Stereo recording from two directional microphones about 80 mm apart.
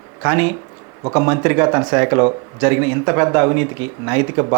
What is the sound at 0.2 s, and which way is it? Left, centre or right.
Speech, centre.